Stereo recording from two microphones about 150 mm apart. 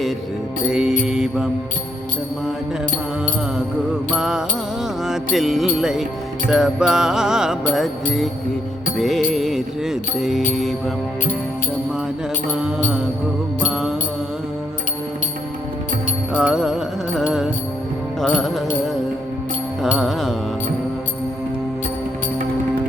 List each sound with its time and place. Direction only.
0.7 s music: 5° right (ahead or behind)
1.0 s mantra: 5° right (ahead or behind)
4.1 s music: 5° right (ahead or behind)
12.6 s music: 5° right (ahead or behind)
16.3 s music: 5° right (ahead or behind)
18.2 s music: 5° left (ahead or behind)
20.0 s music: centre (ahead or behind)